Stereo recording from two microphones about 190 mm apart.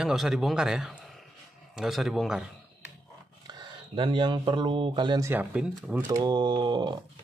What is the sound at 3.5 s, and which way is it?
Speech, 25° right (ahead or behind).